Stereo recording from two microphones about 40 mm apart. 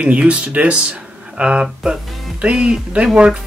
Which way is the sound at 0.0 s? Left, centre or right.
Right.